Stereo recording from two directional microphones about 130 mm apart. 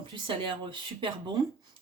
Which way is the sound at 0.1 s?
40° right (ahead or behind).